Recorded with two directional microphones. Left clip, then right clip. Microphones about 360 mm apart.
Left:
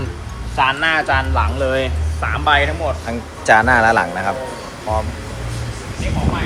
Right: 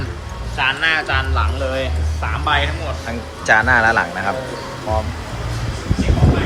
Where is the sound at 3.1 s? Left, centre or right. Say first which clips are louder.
Left 1 dB; centre.